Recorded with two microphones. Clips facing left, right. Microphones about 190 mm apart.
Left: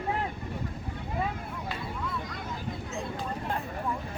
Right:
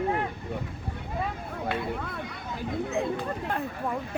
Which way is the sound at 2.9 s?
60° right (ahead or behind).